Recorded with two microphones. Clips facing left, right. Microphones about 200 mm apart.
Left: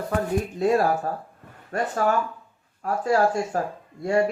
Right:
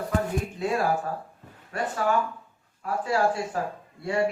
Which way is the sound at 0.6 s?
40° left (ahead or behind).